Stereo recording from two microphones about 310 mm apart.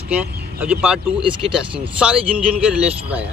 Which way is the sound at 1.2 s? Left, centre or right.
Centre.